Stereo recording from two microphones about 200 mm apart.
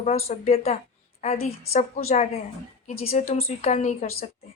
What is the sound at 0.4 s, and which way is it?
A woman's voice, 30° left (ahead or behind).